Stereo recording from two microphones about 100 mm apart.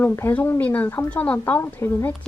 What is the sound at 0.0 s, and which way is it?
A woman's voice, 20° left (ahead or behind).